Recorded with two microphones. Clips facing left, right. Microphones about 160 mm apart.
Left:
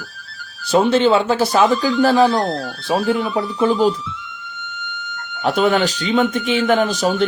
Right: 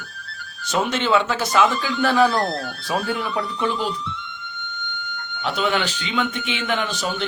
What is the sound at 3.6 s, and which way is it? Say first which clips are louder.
Speech: left 8 dB; 40° left (ahead or behind).